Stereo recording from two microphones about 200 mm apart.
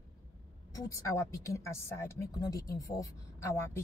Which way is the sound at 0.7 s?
15° left (ahead or behind).